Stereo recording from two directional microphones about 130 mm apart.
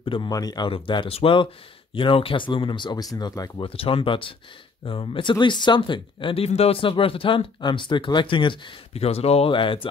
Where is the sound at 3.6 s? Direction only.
45° left (ahead or behind).